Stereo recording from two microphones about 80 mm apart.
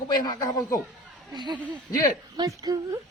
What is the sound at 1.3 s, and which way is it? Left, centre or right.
A woman's voice, right.